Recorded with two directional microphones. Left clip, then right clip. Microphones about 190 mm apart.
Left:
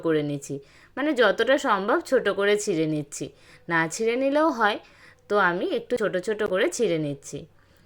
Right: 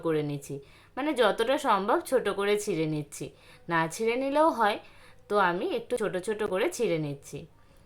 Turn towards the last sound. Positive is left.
turn(degrees=15)  # may be behind; listen again after turning